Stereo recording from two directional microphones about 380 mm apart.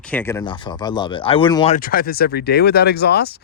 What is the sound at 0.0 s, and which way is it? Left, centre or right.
Speech, centre.